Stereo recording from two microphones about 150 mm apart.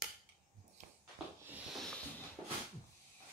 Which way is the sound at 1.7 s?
Centre (ahead or behind).